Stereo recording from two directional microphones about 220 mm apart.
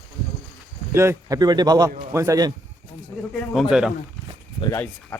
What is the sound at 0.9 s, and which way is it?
A man's voice, 10° right (ahead or behind).